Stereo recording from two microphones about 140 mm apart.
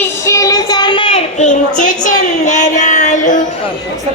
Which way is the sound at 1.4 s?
65° left (ahead or behind).